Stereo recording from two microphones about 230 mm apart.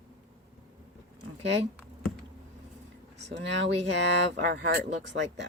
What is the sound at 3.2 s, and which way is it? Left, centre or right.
Speech, right.